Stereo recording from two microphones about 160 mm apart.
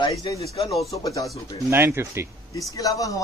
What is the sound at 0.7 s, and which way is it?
Speech, centre (ahead or behind).